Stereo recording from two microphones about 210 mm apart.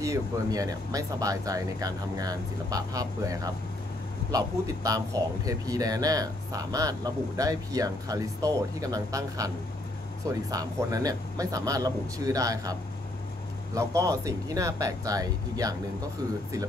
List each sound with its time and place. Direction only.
0.0 s speech: 15° right (ahead or behind)
10.5 s speech: 15° right (ahead or behind)
13.7 s speech: 15° right (ahead or behind)